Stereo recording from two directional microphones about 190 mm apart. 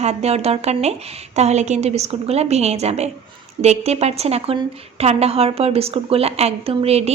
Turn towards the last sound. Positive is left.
turn(degrees=-35)  # may be behind; listen again after turning